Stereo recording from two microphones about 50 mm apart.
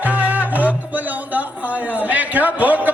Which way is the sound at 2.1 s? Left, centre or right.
Right.